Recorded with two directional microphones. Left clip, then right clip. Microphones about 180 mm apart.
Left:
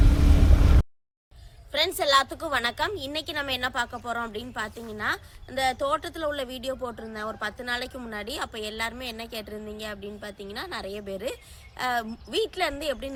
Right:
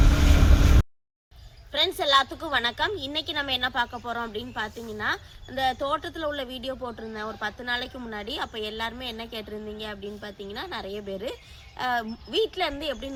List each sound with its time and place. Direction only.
1.7 s a woman's voice: 15° left (ahead or behind)